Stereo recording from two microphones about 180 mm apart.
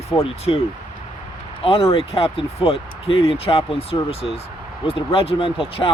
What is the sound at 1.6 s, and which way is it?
Speech, 30° left (ahead or behind).